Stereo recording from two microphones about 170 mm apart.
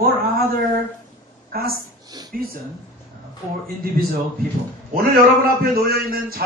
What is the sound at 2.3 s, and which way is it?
Speech, 60° right (ahead or behind).